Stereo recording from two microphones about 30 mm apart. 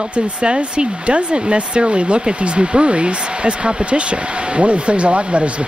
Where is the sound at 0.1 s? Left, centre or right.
Right.